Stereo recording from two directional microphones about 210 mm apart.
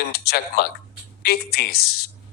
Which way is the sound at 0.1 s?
50° left (ahead or behind).